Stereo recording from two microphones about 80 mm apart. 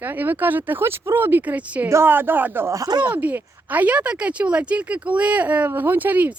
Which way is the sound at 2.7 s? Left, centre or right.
Right.